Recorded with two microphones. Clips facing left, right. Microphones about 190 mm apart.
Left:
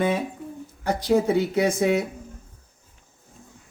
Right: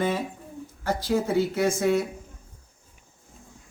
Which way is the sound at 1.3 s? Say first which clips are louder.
Left 2 dB; 65° left (ahead or behind).